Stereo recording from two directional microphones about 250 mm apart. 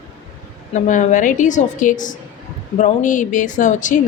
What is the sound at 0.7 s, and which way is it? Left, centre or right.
A woman's voice, left.